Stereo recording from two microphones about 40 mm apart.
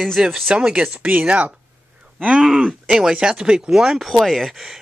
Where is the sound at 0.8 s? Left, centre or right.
Right.